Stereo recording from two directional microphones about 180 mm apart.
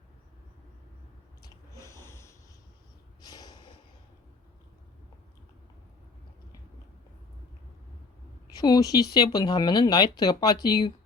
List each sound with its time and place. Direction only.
1.4 s a sound: 20° left (ahead or behind)
3.2 s snort: 20° left (ahead or behind)
8.5 s speech: 20° left (ahead or behind)